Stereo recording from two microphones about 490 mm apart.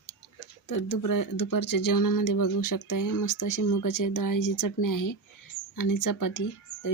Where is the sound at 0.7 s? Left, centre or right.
Left.